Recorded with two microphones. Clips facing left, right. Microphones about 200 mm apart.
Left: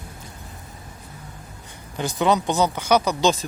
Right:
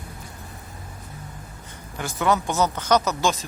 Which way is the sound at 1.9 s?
20° left (ahead or behind).